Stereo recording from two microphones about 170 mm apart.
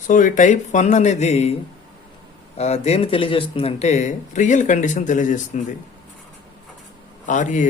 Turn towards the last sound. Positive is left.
turn(degrees=45)  # may be behind; listen again after turning